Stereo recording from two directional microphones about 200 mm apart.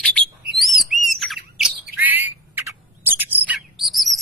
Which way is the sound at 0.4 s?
50° right (ahead or behind).